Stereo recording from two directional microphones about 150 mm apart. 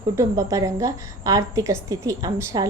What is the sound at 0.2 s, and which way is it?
A woman's voice, 20° right (ahead or behind).